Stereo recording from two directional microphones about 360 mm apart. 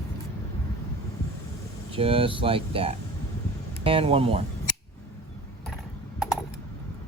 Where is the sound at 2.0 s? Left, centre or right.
Centre.